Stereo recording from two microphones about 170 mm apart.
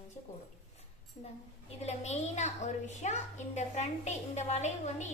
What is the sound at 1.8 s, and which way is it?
A woman's voice, 40° left (ahead or behind).